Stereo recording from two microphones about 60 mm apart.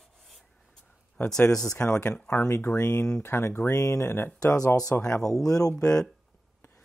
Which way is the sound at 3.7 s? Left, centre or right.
Left.